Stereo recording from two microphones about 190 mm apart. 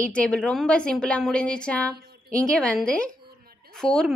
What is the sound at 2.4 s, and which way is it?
A woman's voice, 5° left (ahead or behind).